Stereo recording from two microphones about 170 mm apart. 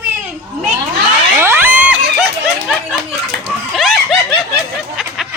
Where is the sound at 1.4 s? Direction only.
15° right (ahead or behind).